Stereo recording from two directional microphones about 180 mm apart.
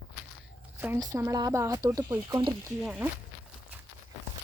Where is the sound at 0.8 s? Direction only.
15° right (ahead or behind).